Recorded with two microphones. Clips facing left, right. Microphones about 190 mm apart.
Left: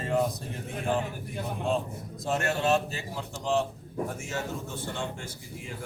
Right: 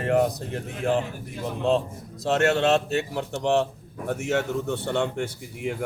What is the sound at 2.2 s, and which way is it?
Speech, 75° right (ahead or behind).